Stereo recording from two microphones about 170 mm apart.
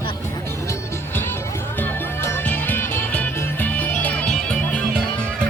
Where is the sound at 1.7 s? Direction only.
10° left (ahead or behind).